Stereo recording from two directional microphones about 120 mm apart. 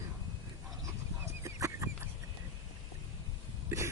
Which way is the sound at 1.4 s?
25° right (ahead or behind).